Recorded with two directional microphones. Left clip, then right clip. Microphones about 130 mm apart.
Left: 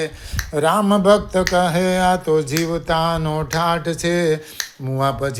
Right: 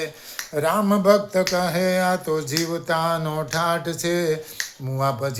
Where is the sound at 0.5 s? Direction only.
35° left (ahead or behind).